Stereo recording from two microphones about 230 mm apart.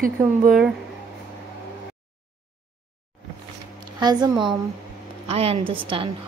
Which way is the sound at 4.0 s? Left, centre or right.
Centre.